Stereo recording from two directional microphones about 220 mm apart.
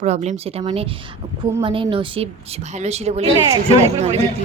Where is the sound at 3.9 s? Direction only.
30° right (ahead or behind).